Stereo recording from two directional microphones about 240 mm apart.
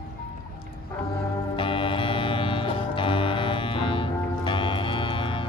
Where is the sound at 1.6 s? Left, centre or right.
Left.